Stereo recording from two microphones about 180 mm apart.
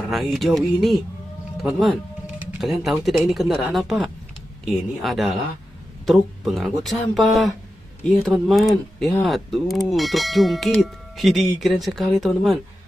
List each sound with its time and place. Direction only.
0.1 s speech: centre (ahead or behind)